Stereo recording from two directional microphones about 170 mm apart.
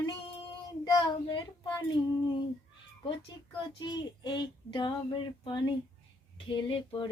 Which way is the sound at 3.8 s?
25° left (ahead or behind).